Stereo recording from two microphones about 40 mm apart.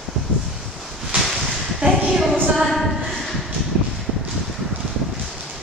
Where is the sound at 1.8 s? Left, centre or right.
Right.